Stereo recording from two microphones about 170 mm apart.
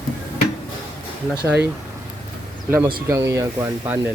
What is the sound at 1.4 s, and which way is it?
Speech, 10° right (ahead or behind).